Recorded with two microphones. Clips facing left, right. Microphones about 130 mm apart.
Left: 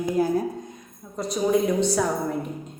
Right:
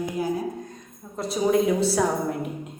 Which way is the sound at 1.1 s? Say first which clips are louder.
Right 1 dB; centre (ahead or behind).